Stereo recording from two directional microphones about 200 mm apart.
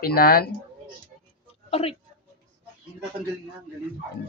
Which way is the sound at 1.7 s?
30° left (ahead or behind).